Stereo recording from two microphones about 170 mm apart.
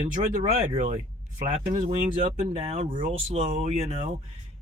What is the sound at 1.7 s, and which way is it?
Speech, 45° right (ahead or behind).